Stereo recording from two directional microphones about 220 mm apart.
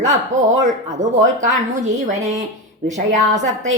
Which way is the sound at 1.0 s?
35° right (ahead or behind).